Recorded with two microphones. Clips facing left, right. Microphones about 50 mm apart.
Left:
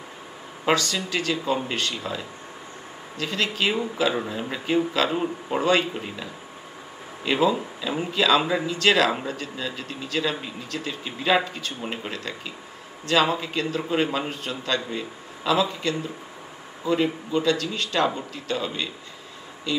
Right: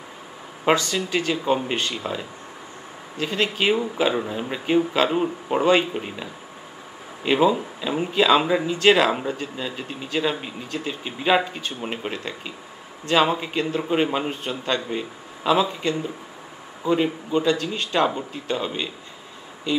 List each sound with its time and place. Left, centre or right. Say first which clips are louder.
0.7 s speech: right 2 dB; right
5.1 s speech: right 3 dB; centre
5.6 s speech: right 3 dB; centre
7.2 s speech: right 3 dB; centre